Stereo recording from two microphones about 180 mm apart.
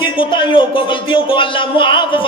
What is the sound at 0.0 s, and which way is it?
Speech, 25° left (ahead or behind).